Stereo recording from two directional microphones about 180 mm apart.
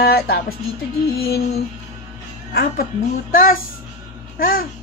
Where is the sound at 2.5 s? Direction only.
60° left (ahead or behind).